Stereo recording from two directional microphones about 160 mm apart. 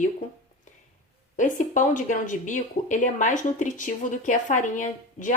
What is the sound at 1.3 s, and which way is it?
Speech, 50° left (ahead or behind).